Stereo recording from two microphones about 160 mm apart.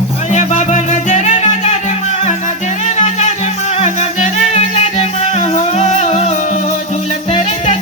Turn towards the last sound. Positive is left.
turn(degrees=45)  # may be behind; listen again after turning